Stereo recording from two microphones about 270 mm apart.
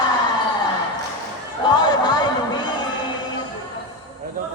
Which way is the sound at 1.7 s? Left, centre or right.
Centre.